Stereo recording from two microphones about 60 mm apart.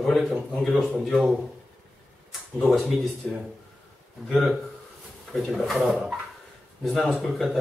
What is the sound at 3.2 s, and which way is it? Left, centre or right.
Speech, centre.